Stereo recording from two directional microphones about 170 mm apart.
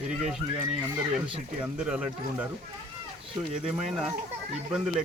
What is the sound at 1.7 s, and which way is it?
Speech, 5° right (ahead or behind).